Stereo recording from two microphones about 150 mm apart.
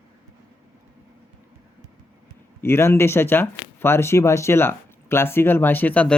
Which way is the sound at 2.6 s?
15° left (ahead or behind).